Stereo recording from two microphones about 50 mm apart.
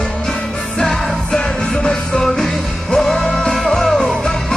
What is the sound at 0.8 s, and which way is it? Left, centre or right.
Music, centre.